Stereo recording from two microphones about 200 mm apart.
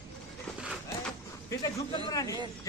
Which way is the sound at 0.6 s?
5° right (ahead or behind).